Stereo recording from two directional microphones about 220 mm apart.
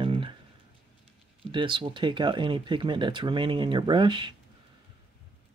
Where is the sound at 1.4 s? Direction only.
20° right (ahead or behind).